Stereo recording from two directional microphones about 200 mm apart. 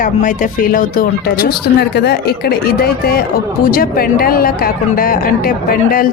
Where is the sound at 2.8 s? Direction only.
50° left (ahead or behind).